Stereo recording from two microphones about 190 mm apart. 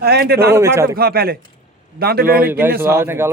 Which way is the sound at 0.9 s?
55° right (ahead or behind).